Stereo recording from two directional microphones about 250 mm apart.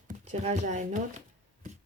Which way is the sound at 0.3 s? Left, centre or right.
Right.